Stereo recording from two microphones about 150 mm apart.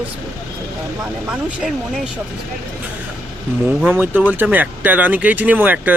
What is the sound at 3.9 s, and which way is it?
Speech, 10° right (ahead or behind).